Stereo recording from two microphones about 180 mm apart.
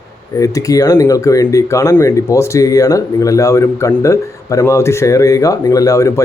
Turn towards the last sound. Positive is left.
turn(degrees=15)  # may be behind; listen again after turning